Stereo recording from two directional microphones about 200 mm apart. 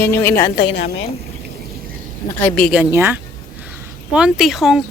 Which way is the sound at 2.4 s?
5° left (ahead or behind).